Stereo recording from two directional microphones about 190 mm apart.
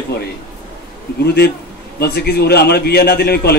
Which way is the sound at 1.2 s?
55° left (ahead or behind).